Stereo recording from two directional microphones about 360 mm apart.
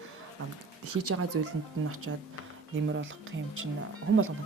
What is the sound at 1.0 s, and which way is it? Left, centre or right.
Speech, right.